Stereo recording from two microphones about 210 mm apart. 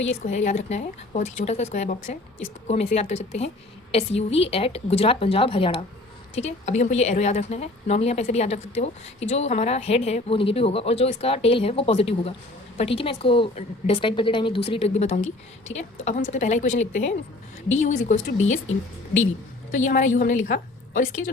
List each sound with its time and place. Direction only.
0.1 s a woman's voice: 35° left (ahead or behind)
19.7 s a woman's voice: 35° left (ahead or behind)